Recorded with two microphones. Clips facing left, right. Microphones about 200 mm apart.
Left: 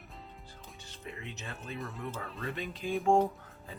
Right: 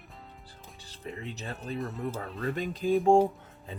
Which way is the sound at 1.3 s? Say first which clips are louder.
Right 6 dB; 35° right (ahead or behind).